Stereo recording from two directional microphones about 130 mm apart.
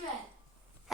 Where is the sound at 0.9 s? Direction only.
Centre (ahead or behind).